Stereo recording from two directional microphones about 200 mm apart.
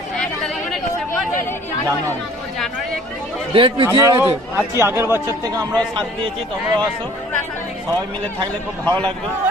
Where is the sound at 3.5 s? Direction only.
25° right (ahead or behind).